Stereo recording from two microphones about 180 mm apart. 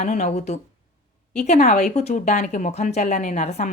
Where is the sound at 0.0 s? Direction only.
40° left (ahead or behind).